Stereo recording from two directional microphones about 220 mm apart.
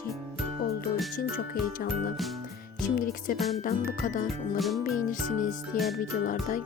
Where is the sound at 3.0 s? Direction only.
40° left (ahead or behind).